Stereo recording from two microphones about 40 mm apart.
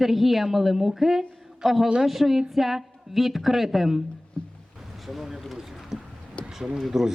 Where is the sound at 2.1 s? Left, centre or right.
Centre.